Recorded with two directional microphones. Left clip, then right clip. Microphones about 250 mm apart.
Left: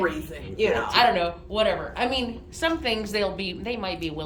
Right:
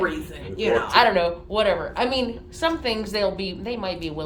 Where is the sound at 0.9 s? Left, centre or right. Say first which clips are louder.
Right 3 dB; centre.